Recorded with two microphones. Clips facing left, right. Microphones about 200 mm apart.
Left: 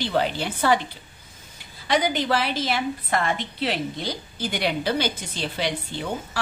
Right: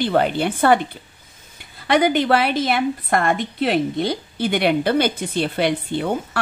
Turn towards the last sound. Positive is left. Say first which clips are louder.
# right 7 dB
turn(degrees=-55)  # may be behind; listen again after turning